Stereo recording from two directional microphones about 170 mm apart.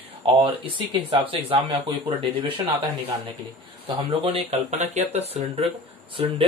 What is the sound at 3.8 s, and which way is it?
Speech, 35° right (ahead or behind).